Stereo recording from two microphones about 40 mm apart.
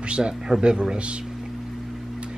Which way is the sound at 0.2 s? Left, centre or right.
Centre.